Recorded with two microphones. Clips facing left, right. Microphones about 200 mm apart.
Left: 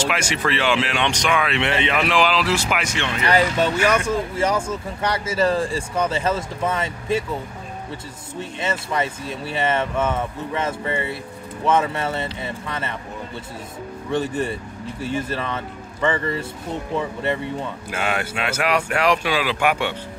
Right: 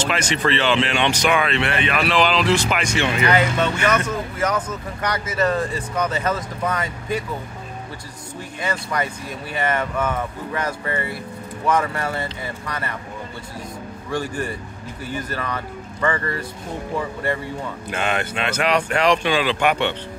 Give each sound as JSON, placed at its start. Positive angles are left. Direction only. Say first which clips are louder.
{"t": 0.0, "sound": "speech", "louder": "right 1 dB", "side_deg": 10}
{"t": 1.5, "sound": "speech", "louder": "even", "side_deg": 20}
{"t": 2.1, "sound": "speech", "louder": "right 4 dB", "side_deg": 5}
{"t": 3.3, "sound": "speech", "louder": "left 3 dB", "side_deg": 35}
{"t": 3.8, "sound": "speech", "louder": "even", "side_deg": 10}
{"t": 4.1, "sound": "speech", "louder": "left 2 dB", "side_deg": 30}
{"t": 8.4, "sound": "speech", "louder": "left 1 dB", "side_deg": 25}
{"t": 14.1, "sound": "speech", "louder": "left 3 dB", "side_deg": 25}
{"t": 17.8, "sound": "speech", "louder": "right 2 dB", "side_deg": 5}